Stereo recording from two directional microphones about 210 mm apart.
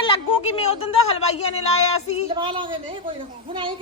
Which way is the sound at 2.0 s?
30° left (ahead or behind).